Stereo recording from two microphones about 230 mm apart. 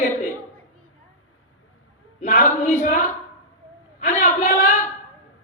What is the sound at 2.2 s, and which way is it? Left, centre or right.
Speech, left.